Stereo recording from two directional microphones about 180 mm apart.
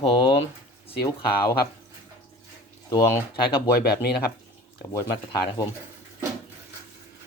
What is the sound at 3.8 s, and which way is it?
Speech, 60° left (ahead or behind).